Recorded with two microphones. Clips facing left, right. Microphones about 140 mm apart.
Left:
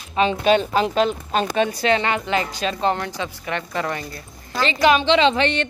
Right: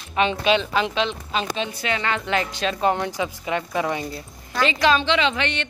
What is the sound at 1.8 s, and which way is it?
Speech, 30° left (ahead or behind).